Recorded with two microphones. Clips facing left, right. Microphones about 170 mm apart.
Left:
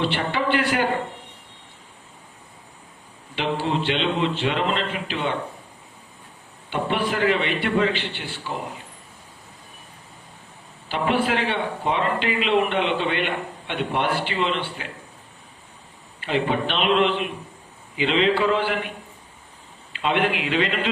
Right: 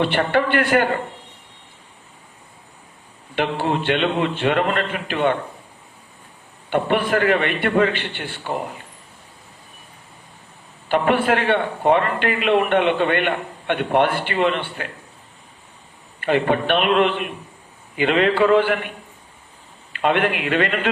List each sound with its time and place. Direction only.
0.0 s a man's voice: 55° right (ahead or behind)
3.3 s a man's voice: 55° right (ahead or behind)
6.7 s a man's voice: 55° right (ahead or behind)
10.8 s a man's voice: 55° right (ahead or behind)
16.2 s a man's voice: 55° right (ahead or behind)
19.9 s a man's voice: 55° right (ahead or behind)